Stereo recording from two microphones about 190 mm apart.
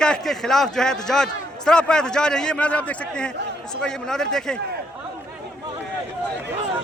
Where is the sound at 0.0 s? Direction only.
5° left (ahead or behind).